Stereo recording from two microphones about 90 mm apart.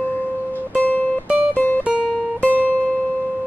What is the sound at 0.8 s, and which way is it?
Music, 20° left (ahead or behind).